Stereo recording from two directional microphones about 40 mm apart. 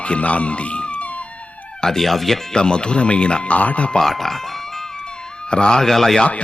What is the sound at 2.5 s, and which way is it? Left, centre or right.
Speech, left.